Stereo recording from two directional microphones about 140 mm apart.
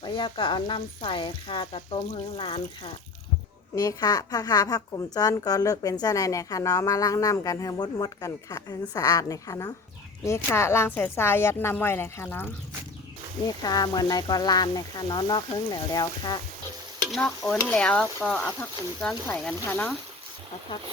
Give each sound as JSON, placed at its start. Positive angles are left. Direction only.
{"t": 0.0, "sound": "speech", "side_deg": 35}
{"t": 3.8, "sound": "a woman's voice", "side_deg": 25}
{"t": 13.5, "sound": "a woman's voice", "side_deg": 30}
{"t": 17.0, "sound": "a woman's voice", "side_deg": 5}